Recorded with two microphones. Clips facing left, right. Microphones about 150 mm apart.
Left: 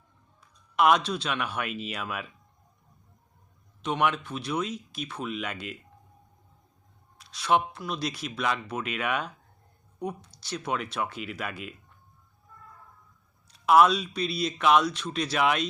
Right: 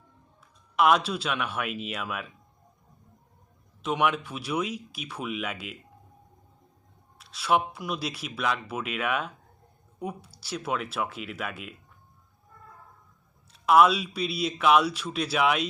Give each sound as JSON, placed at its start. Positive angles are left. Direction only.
{"t": 0.8, "sound": "speech", "side_deg": -5}
{"t": 3.8, "sound": "speech", "side_deg": -5}
{"t": 7.2, "sound": "speech", "side_deg": -5}
{"t": 13.5, "sound": "speech", "side_deg": 0}